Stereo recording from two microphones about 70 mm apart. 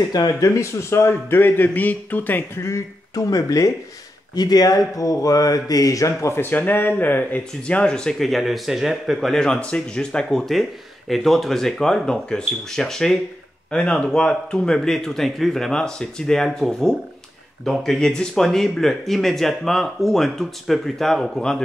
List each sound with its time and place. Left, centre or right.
0.4 s a man's voice: left
2.6 s speech: left
4.4 s speech: left
6.4 s a man's voice: left
7.6 s speech: centre